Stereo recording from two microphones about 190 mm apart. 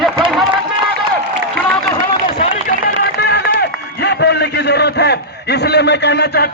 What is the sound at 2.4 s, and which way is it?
Run, 45° left (ahead or behind).